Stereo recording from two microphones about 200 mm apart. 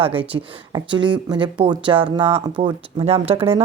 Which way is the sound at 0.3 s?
25° right (ahead or behind).